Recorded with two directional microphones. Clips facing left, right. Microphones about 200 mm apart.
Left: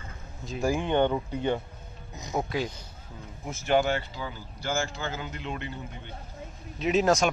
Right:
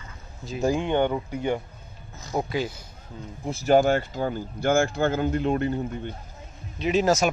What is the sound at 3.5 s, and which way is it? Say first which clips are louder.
Speech: right 6 dB; 40° right (ahead or behind).